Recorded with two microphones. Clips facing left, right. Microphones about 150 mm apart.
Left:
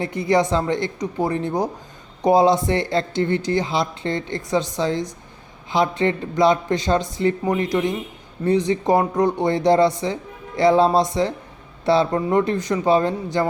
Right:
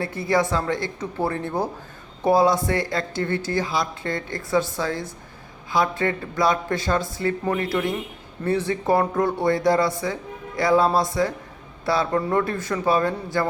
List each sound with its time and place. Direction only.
0.0 s a woman's voice: 20° left (ahead or behind)